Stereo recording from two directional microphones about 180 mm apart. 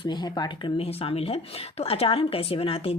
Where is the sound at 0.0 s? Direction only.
25° left (ahead or behind).